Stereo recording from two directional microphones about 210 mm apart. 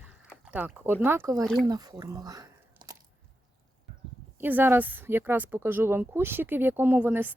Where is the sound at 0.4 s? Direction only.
5° right (ahead or behind).